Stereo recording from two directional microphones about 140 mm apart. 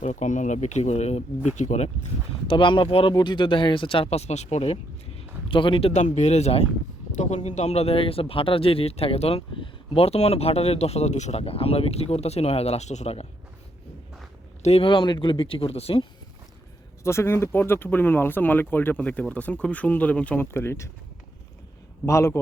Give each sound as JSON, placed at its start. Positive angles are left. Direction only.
{"t": 0.0, "sound": "speech", "side_deg": 60}
{"t": 2.5, "sound": "speech", "side_deg": 35}
{"t": 5.5, "sound": "speech", "side_deg": 40}
{"t": 14.6, "sound": "speech", "side_deg": 45}
{"t": 17.0, "sound": "speech", "side_deg": 20}
{"t": 22.0, "sound": "a man's voice", "side_deg": 20}